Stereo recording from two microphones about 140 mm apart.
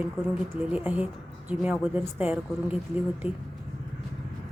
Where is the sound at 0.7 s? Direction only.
10° right (ahead or behind).